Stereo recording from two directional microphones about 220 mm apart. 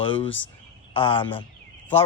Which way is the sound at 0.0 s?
25° left (ahead or behind).